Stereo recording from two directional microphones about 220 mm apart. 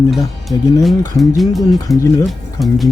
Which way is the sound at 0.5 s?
15° left (ahead or behind).